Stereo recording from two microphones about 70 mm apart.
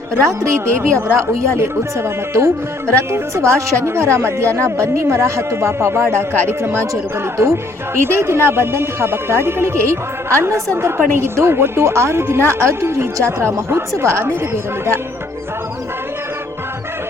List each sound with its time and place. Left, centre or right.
0.1 s a woman's voice: right